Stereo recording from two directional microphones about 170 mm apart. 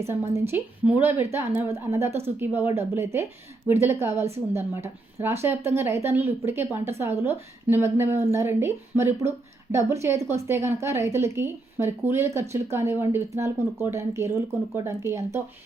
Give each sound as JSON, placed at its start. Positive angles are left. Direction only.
{"t": 0.0, "sound": "speech", "side_deg": -15}